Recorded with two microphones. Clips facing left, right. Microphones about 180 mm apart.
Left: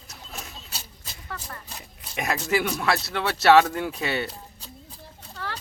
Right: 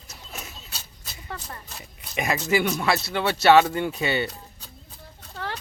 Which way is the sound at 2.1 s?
Centre (ahead or behind).